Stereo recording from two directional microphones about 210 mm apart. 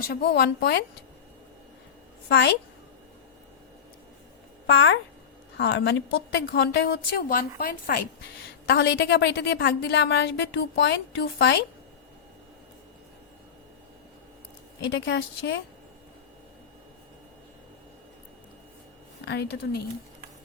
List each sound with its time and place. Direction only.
0.1 s a woman's voice: 50° left (ahead or behind)
4.6 s a woman's voice: 60° left (ahead or behind); by 8.0 s 45° left (ahead or behind)
8.6 s a woman's voice: 55° left (ahead or behind)
14.8 s a woman's voice: 60° left (ahead or behind)
19.2 s a woman's voice: 55° left (ahead or behind)